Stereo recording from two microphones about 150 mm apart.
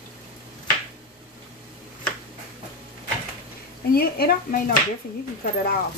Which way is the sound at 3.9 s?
90° left.